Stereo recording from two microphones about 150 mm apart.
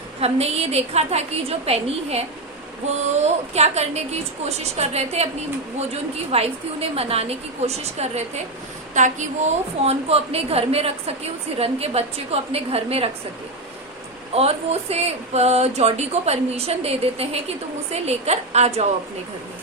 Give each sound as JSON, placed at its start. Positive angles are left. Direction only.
{"t": 0.2, "sound": "speech", "side_deg": -45}
{"t": 6.3, "sound": "speech", "side_deg": -40}
{"t": 14.3, "sound": "speech", "side_deg": -45}